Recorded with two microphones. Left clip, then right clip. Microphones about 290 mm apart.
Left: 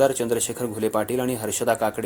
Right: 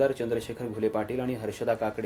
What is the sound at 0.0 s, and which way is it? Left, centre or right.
Speech, left.